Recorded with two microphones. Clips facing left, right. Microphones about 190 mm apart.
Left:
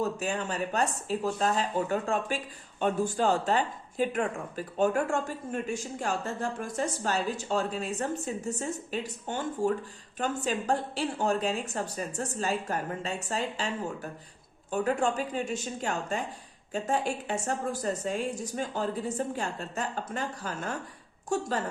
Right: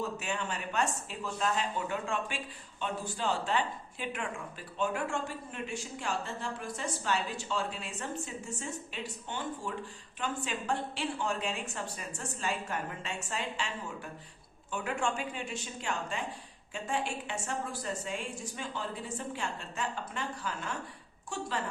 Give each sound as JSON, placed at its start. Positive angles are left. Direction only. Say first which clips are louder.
{"t": 0.0, "sound": "a woman's voice", "louder": "left 5 dB", "side_deg": 40}